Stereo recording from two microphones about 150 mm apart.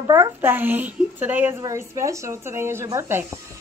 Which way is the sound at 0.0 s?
20° right (ahead or behind).